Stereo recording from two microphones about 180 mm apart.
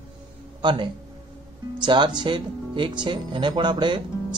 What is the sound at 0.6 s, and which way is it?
Speech, 25° right (ahead or behind).